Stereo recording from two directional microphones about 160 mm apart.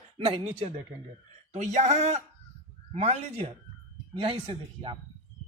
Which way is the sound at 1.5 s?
45° right (ahead or behind).